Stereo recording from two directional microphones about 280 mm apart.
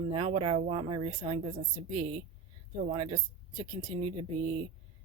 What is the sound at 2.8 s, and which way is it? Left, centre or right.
Speech, right.